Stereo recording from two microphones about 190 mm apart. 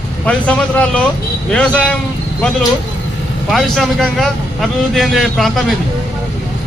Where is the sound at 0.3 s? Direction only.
5° left (ahead or behind).